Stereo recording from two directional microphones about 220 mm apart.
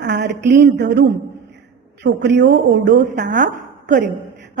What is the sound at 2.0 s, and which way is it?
Speech, 50° right (ahead or behind).